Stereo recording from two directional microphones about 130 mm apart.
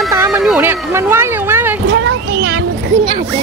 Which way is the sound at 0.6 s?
20° right (ahead or behind).